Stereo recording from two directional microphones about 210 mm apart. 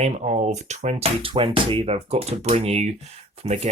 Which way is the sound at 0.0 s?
35° right (ahead or behind).